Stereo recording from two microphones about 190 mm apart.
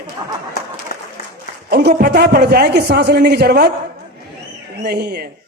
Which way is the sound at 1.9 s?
50° right (ahead or behind).